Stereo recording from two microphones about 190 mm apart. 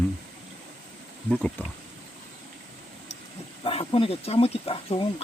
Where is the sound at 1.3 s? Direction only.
5° left (ahead or behind).